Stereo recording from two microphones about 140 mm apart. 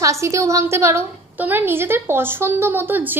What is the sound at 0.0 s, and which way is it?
A woman's voice, 20° right (ahead or behind).